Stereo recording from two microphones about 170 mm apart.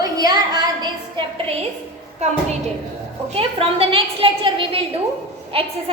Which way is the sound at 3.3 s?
35° right (ahead or behind).